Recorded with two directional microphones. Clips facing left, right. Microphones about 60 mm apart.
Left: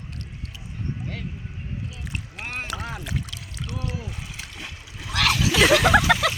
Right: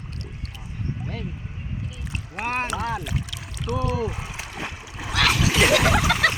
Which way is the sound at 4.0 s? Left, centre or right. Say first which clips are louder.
Right 9 dB; right.